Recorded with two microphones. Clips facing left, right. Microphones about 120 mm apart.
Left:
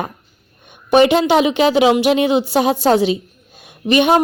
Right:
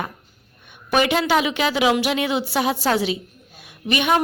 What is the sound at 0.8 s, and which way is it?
A woman's voice, 25° left (ahead or behind).